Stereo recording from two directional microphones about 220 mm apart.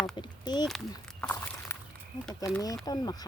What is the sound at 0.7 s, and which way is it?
Speech, 5° left (ahead or behind).